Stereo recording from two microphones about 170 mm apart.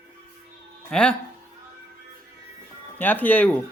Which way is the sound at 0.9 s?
5° left (ahead or behind).